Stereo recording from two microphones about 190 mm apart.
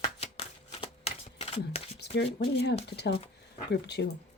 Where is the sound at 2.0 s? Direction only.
60° left (ahead or behind).